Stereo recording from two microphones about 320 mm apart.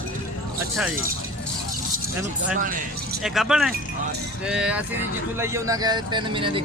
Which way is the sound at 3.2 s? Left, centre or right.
Centre.